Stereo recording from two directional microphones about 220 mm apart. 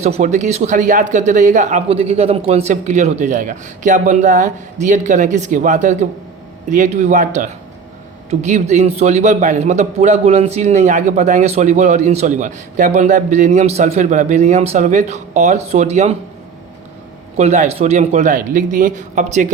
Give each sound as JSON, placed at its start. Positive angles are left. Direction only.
{"t": 0.0, "sound": "a man's voice", "side_deg": -30}
{"t": 17.3, "sound": "a man's voice", "side_deg": -30}